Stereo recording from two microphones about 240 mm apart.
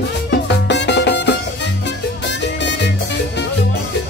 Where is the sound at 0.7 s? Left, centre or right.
Left.